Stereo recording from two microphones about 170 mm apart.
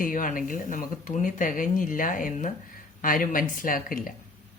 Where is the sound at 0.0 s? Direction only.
50° left (ahead or behind).